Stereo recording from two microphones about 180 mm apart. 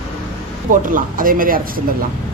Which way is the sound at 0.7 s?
50° right (ahead or behind).